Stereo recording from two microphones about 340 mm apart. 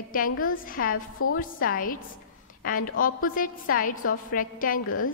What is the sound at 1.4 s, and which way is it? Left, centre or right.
Speech, left.